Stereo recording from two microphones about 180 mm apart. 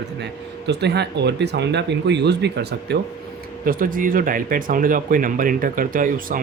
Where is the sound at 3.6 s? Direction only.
50° right (ahead or behind).